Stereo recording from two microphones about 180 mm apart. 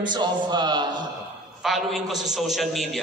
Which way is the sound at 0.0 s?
25° right (ahead or behind).